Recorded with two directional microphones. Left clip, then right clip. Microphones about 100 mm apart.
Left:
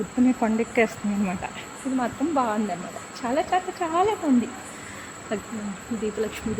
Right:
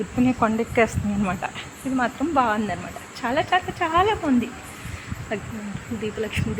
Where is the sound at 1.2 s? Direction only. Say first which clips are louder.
Right 6 dB; centre (ahead or behind).